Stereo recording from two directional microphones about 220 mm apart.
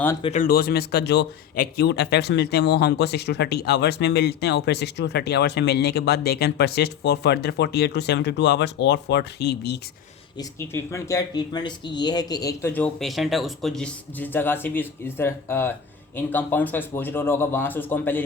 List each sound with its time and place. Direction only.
0.2 s speech: 30° left (ahead or behind)
0.4 s speech: 45° left (ahead or behind)
10.3 s speech: 10° left (ahead or behind)